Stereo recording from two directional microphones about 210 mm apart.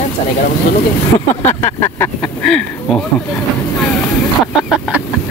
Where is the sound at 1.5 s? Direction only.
10° left (ahead or behind).